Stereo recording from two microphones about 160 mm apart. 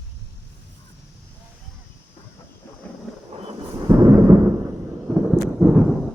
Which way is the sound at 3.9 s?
15° right (ahead or behind).